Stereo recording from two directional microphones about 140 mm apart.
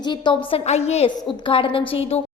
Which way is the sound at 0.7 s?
50° left (ahead or behind).